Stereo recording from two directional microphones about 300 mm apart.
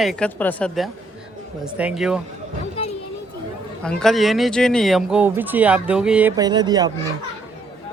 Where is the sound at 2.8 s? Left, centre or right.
Centre.